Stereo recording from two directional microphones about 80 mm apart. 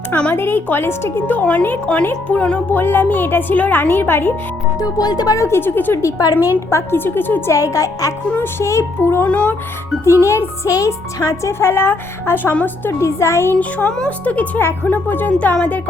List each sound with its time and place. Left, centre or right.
0.1 s speech: centre
0.3 s speech: left
4.8 s speech: left
5.4 s speech: left
6.0 s speech: left
6.7 s speech: left
7.5 s speech: left
9.3 s speech: centre
10.0 s music: left
12.5 s speech: left
12.9 s music: left
13.6 s speech: centre